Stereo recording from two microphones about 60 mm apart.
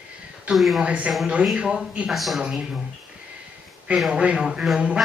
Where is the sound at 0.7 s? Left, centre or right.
Centre.